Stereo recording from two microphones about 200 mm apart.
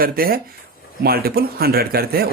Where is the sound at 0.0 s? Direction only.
45° right (ahead or behind).